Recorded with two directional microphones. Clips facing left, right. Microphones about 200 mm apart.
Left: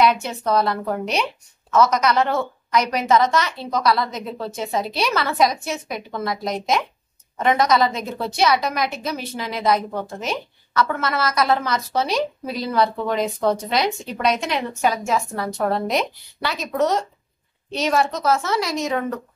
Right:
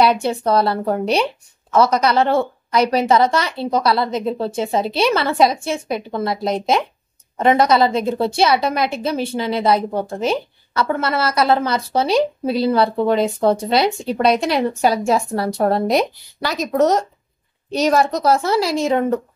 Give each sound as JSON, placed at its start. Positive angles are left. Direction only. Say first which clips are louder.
{"t": 0.0, "sound": "a woman's voice", "louder": "right 3 dB", "side_deg": -30}